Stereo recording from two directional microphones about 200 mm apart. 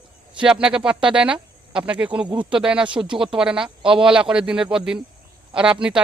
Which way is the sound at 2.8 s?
25° right (ahead or behind).